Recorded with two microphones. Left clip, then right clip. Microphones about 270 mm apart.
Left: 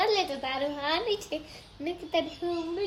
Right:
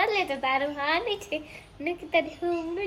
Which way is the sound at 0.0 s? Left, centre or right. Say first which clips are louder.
Right 2 dB; centre.